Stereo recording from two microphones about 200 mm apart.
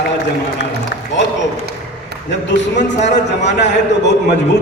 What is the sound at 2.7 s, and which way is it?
Speech, 35° left (ahead or behind).